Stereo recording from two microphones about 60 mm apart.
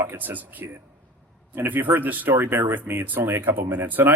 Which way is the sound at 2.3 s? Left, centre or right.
Right.